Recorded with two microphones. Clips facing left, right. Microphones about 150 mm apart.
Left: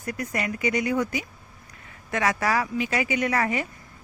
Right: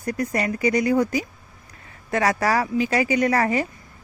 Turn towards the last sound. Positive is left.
turn(degrees=-35)  # may be behind; listen again after turning